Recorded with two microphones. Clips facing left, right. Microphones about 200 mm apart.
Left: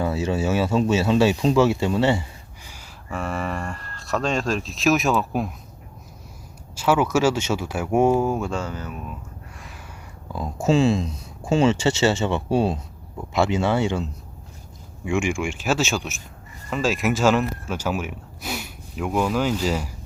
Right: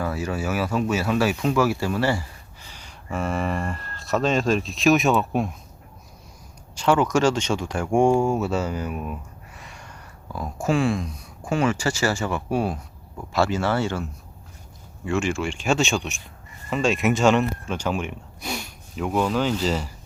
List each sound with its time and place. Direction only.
0.0 s speech: 25° left (ahead or behind)
2.6 s speech: 5° left (ahead or behind)
6.7 s speech: 5° left (ahead or behind); by 9.1 s 10° right (ahead or behind)
9.6 s a sound: centre (ahead or behind)
10.3 s speech: 20° left (ahead or behind)